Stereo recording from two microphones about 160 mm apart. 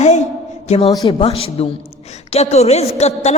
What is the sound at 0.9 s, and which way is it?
A woman's voice, 25° left (ahead or behind).